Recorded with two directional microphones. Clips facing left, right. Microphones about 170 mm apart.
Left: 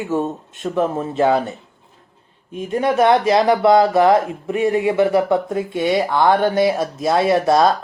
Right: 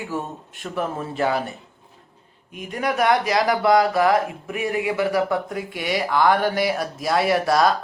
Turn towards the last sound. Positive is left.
turn(degrees=25)  # may be behind; listen again after turning